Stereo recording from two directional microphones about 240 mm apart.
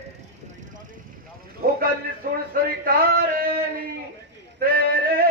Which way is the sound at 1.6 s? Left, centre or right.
Right.